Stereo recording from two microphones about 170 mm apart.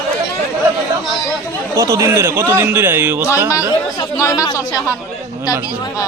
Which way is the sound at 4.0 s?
20° left (ahead or behind).